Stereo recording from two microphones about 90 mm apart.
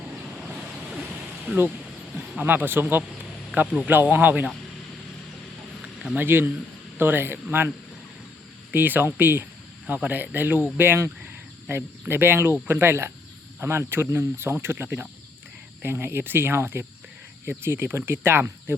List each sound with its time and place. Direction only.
2.4 s speech: 20° right (ahead or behind)
5.8 s a sound: 5° right (ahead or behind)
6.1 s speech: 25° right (ahead or behind)
8.7 s speech: 20° right (ahead or behind)